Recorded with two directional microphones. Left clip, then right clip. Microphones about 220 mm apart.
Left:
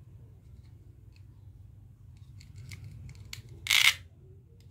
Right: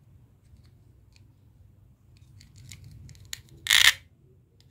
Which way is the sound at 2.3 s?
15° right (ahead or behind).